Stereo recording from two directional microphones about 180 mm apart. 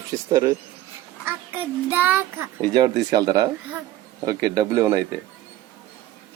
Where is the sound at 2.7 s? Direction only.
20° right (ahead or behind).